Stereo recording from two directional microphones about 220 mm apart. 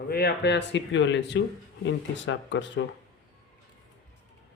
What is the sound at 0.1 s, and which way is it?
Speech, 45° left (ahead or behind).